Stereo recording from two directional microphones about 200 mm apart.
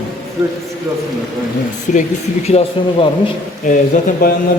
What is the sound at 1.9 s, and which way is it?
A man's voice, 35° left (ahead or behind).